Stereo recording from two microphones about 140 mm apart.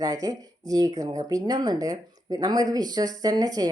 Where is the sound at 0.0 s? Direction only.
25° right (ahead or behind).